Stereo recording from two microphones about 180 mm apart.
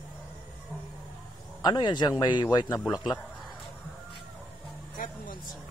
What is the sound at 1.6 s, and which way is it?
A man's voice, 25° left (ahead or behind).